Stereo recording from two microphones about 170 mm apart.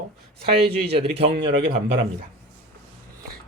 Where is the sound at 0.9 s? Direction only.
35° right (ahead or behind).